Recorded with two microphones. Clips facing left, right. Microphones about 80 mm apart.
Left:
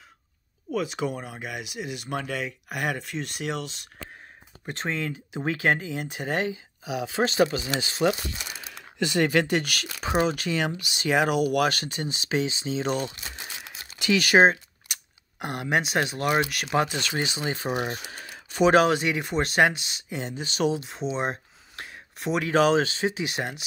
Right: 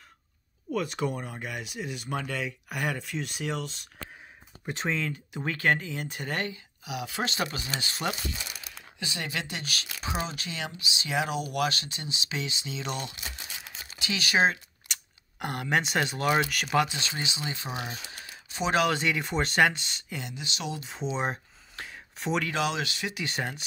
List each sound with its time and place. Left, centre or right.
0.7 s speech: centre
4.6 s speech: centre
5.3 s speech: centre
6.9 s speech: left
8.4 s speech: left
13.9 s speech: left
14.9 s speech: centre
16.8 s speech: left
18.3 s a sound: left
18.9 s speech: centre
20.2 s speech: left
20.8 s speech: centre
22.5 s speech: left
23.2 s speech: centre